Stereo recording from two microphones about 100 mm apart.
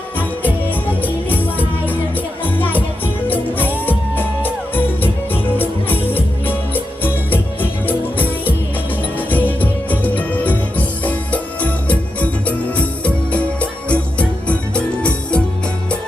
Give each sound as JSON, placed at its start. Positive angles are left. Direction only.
{"t": 1.0, "sound": "music", "side_deg": 20}